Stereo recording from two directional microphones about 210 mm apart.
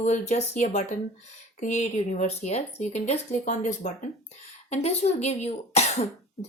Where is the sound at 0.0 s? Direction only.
35° left (ahead or behind).